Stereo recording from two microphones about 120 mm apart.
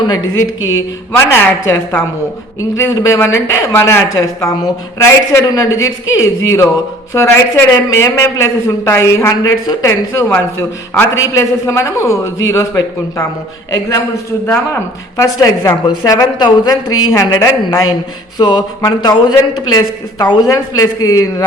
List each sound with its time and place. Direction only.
1.1 s speech: 20° left (ahead or behind)
14.4 s a man's voice: 20° left (ahead or behind)